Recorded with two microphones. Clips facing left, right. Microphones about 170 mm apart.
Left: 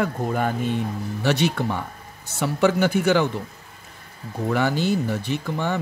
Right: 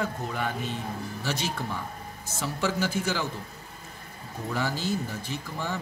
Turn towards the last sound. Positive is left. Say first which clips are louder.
# left 8 dB
turn(degrees=65)  # may be behind; listen again after turning